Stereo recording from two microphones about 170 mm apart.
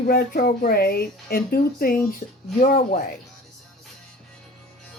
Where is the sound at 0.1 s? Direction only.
60° left (ahead or behind).